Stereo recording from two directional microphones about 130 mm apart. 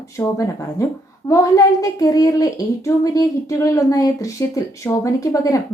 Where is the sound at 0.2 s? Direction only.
20° left (ahead or behind).